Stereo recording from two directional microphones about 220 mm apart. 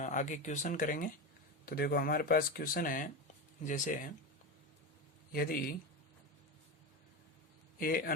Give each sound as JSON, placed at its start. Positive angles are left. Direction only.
{"t": 0.0, "sound": "speech", "side_deg": 35}
{"t": 5.3, "sound": "a man's voice", "side_deg": 40}
{"t": 7.8, "sound": "speech", "side_deg": 40}